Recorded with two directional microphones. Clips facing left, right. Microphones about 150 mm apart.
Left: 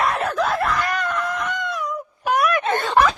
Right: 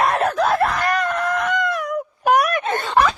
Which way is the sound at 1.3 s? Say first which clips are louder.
Right 5 dB; 75° right (ahead or behind).